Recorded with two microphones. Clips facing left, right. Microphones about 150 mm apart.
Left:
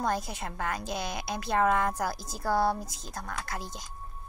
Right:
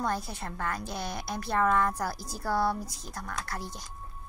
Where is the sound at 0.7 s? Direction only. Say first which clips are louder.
Left 1 dB; 20° left (ahead or behind).